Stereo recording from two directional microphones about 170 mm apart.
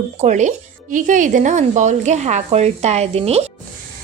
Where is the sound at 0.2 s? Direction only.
45° right (ahead or behind).